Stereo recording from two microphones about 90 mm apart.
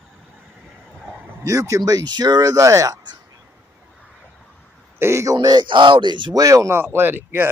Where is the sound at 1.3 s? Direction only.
35° right (ahead or behind).